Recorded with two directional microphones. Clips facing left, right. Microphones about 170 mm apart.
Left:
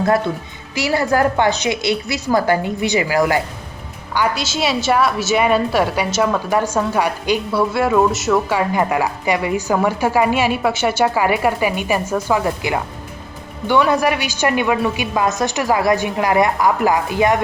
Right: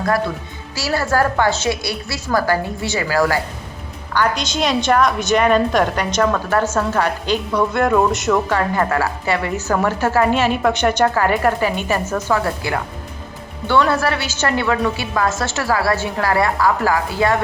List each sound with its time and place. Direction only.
0.8 s a woman's voice: 20° left (ahead or behind)
4.1 s a woman's voice: 10° left (ahead or behind)